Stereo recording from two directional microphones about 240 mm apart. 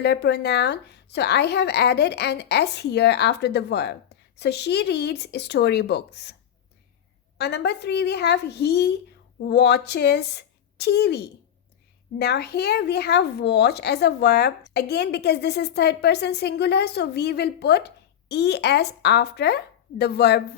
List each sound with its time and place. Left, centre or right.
0.0 s a woman's voice: left
7.3 s a woman's voice: left